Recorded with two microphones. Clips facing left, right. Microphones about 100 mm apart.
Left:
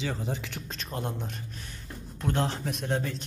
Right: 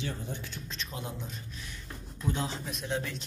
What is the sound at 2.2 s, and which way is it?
Speech, 60° left (ahead or behind).